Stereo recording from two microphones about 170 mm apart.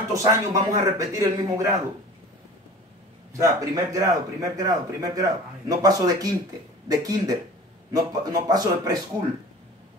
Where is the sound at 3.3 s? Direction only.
20° right (ahead or behind).